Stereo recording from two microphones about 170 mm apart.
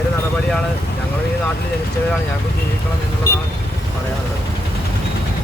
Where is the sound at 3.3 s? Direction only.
70° left (ahead or behind).